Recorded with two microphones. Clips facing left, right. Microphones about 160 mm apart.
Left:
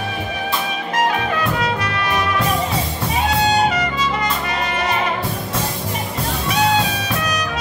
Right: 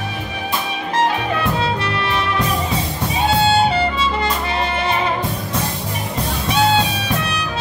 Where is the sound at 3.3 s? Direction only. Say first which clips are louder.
Right 2 dB; 30° right (ahead or behind).